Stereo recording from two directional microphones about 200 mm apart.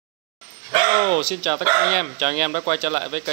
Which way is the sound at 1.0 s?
35° right (ahead or behind).